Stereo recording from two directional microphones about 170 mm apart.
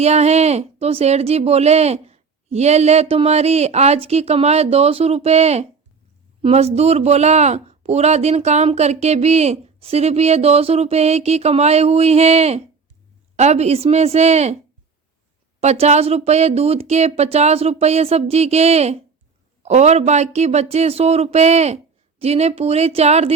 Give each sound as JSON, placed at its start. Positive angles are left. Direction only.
{"t": 0.0, "sound": "speech", "side_deg": -40}
{"t": 15.6, "sound": "speech", "side_deg": -40}